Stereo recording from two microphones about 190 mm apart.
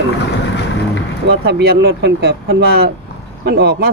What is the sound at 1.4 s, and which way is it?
Speech, 55° right (ahead or behind).